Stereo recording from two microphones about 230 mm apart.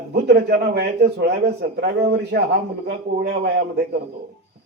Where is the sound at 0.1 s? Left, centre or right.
Right.